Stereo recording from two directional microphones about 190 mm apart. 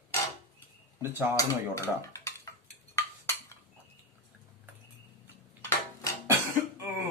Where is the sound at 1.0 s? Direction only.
10° right (ahead or behind).